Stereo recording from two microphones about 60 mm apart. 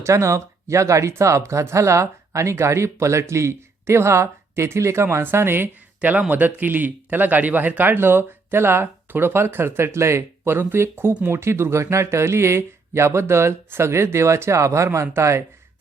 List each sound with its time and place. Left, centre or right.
0.0 s speech: right
6.0 s a man's voice: right
7.9 s speech: right